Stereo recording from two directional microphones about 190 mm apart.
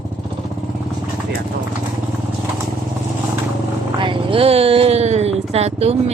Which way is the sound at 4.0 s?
25° right (ahead or behind).